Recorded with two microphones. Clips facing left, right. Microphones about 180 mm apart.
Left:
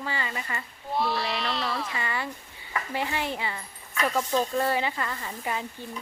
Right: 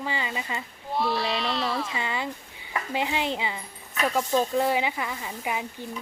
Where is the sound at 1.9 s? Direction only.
20° right (ahead or behind).